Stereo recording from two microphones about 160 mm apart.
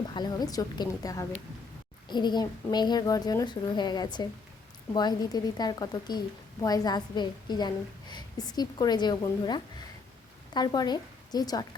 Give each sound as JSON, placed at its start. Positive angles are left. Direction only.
{"t": 0.1, "sound": "a woman's voice", "side_deg": 25}